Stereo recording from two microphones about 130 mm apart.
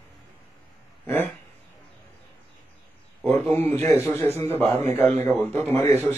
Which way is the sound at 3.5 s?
15° left (ahead or behind).